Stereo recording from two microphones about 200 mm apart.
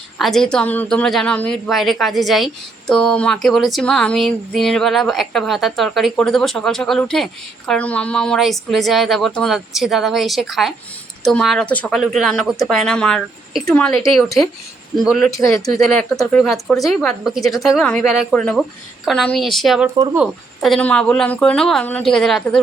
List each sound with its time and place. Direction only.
0.2 s speech: centre (ahead or behind)
14.9 s speech: centre (ahead or behind)
15.3 s speech: 15° left (ahead or behind)
16.4 s speech: centre (ahead or behind)